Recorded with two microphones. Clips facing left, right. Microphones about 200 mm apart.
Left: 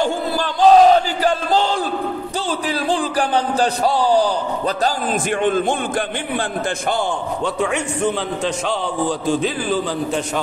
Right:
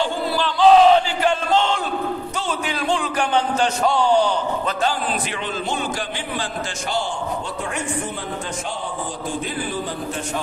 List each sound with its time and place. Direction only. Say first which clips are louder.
0.0 s battle cry: left 2 dB; 45° left (ahead or behind)
2.9 s a man's voice: left 1 dB; 35° left (ahead or behind)
5.4 s a man's voice: left 7 dB; 50° left (ahead or behind)
7.6 s a man's voice: left 8 dB; 70° left (ahead or behind)
9.3 s a man's voice: left 5 dB; 90° left